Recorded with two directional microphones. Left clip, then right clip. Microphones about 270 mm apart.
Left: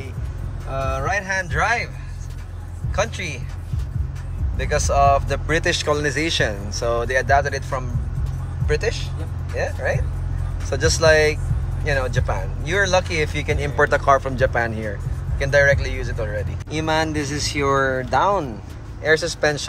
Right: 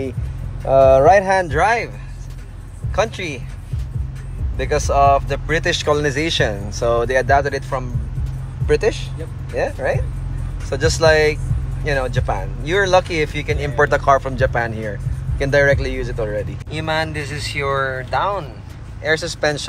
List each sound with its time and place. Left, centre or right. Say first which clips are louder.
0.7 s speech: right 14 dB; centre
3.0 s speech: right 4 dB; centre
4.6 s speech: right 3 dB; centre
16.7 s speech: even; centre